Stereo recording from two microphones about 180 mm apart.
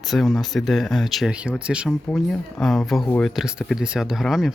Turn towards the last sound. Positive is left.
turn(degrees=0)  # may be behind; listen again after turning